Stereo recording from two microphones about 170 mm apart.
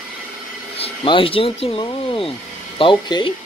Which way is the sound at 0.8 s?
30° left (ahead or behind).